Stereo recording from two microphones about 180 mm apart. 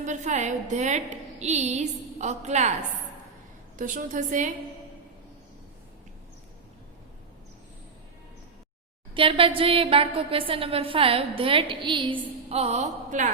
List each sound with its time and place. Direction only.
0.0 s a woman's voice: 45° right (ahead or behind)
3.8 s a woman's voice: 45° right (ahead or behind)
9.1 s a woman's voice: 30° right (ahead or behind)